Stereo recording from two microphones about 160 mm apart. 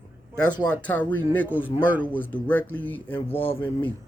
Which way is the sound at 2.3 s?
10° left (ahead or behind).